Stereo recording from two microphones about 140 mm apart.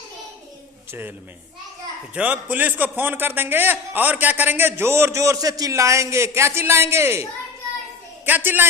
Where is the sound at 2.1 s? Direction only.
10° right (ahead or behind).